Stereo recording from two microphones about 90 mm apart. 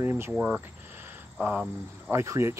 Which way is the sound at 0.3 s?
15° right (ahead or behind).